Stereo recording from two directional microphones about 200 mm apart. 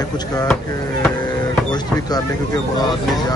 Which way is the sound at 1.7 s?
20° left (ahead or behind).